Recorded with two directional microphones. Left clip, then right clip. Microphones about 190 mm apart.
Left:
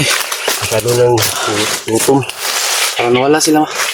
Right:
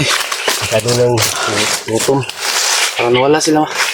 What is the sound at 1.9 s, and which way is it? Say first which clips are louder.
Speech: left 2 dB; 65° left (ahead or behind).